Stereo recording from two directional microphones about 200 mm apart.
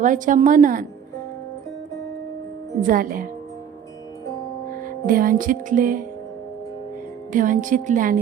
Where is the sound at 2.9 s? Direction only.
45° right (ahead or behind).